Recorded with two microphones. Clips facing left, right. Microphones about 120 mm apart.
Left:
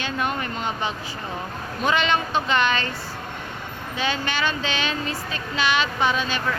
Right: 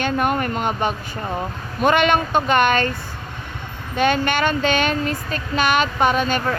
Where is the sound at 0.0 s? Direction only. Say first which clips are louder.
Right 6 dB; 50° right (ahead or behind).